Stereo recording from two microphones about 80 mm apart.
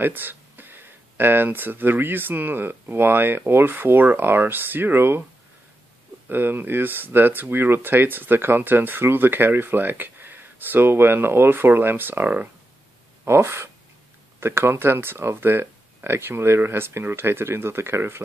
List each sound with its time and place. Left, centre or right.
0.0 s speech: right
6.2 s speech: right